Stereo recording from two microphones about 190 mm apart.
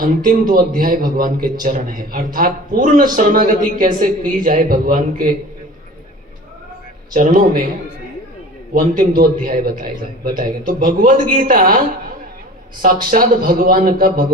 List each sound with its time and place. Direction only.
0.5 s a man's voice: 50° right (ahead or behind)
7.1 s a man's voice: 45° right (ahead or behind)
8.7 s a man's voice: 45° right (ahead or behind)
12.8 s a man's voice: 50° right (ahead or behind)